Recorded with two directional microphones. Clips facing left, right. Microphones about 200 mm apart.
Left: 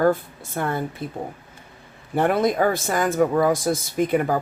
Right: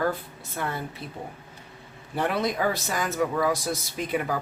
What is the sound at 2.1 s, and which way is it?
Speech, 50° left (ahead or behind).